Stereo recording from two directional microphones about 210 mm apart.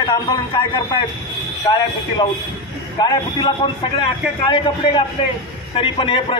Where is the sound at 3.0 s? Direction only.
20° left (ahead or behind).